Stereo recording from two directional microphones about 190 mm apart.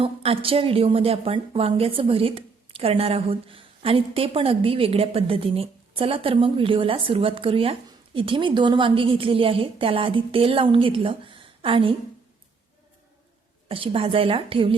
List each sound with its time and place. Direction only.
0.0 s a woman's voice: 30° right (ahead or behind)
13.7 s a woman's voice: 30° right (ahead or behind)